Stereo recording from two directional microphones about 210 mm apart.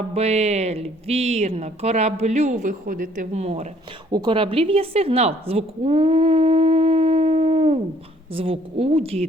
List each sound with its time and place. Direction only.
0.1 s a woman's voice: 30° right (ahead or behind)